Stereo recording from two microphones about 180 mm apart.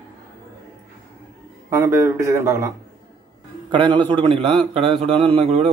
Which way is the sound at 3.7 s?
25° right (ahead or behind).